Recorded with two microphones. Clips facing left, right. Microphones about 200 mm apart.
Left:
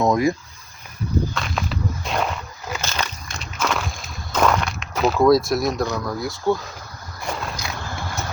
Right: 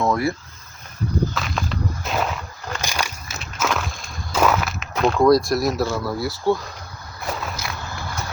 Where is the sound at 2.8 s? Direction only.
10° right (ahead or behind).